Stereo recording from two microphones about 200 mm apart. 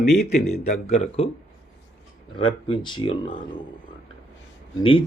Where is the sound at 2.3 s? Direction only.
25° left (ahead or behind).